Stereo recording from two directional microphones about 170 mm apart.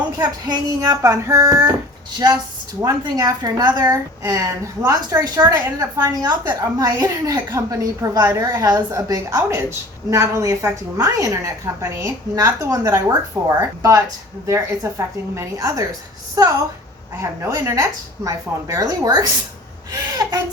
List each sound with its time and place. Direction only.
0.2 s a woman's voice: 25° right (ahead or behind)